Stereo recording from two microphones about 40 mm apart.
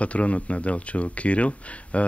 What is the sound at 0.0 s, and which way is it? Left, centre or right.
Speech, left.